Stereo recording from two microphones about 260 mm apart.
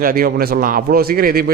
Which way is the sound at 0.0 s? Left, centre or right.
Right.